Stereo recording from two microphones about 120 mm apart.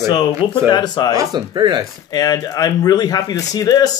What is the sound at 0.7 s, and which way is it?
Speech, 35° left (ahead or behind).